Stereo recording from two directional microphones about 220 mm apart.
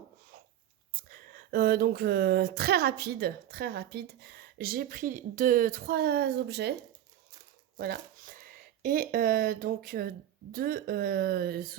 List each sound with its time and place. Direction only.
1.0 s speech: 40° right (ahead or behind)
7.8 s speech: 40° right (ahead or behind)